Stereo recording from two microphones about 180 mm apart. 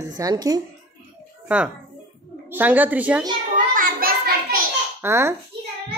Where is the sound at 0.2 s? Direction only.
20° right (ahead or behind).